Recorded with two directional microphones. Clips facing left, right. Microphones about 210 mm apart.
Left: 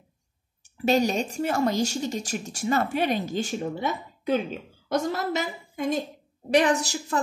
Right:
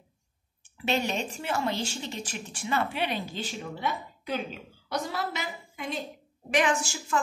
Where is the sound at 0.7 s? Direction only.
40° left (ahead or behind).